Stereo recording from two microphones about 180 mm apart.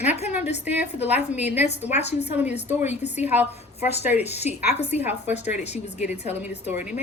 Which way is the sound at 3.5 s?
35° left (ahead or behind).